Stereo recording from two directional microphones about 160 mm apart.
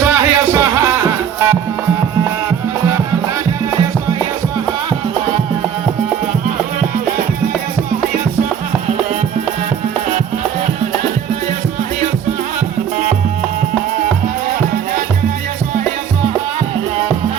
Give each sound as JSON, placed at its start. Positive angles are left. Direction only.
{"t": 0.0, "sound": "music", "side_deg": -15}